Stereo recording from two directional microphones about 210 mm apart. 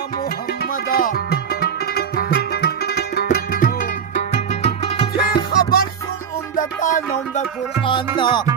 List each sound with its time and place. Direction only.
0.6 s music: 45° left (ahead or behind); by 5.0 s 25° left (ahead or behind)
5.1 s music: 45° left (ahead or behind)
7.9 s music: 25° left (ahead or behind)